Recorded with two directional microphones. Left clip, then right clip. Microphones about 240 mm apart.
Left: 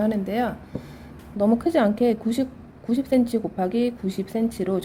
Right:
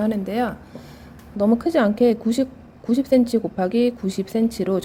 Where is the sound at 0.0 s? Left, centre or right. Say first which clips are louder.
Right 1 dB; centre.